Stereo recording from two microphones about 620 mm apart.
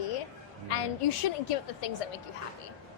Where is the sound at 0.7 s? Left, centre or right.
Left.